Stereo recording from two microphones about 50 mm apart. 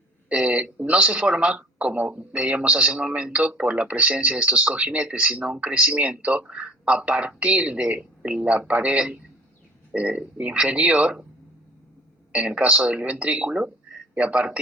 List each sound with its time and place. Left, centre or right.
0.3 s a woman's voice: right
12.3 s a woman's voice: right